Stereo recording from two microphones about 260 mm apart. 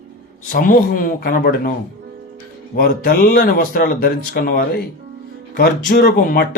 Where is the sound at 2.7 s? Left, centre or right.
Left.